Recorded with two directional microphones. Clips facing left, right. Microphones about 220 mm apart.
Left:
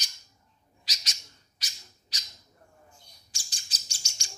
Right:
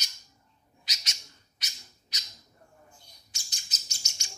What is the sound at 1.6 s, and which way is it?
Bird, 30° left (ahead or behind).